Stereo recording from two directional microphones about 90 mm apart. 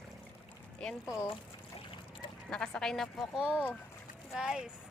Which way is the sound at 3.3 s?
10° right (ahead or behind).